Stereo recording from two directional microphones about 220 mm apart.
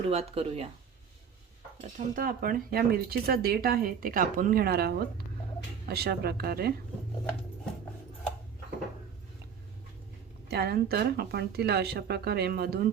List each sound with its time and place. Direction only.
0.1 s speech: 30° right (ahead or behind)
1.8 s speech: 40° right (ahead or behind)
10.5 s speech: 45° right (ahead or behind)